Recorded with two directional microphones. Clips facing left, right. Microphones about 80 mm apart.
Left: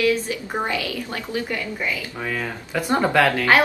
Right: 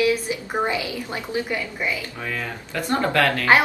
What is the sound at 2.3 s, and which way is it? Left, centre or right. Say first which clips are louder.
Speech: left 3 dB; centre.